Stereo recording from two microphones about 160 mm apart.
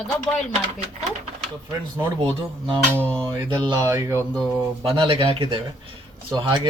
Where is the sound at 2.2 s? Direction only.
30° right (ahead or behind).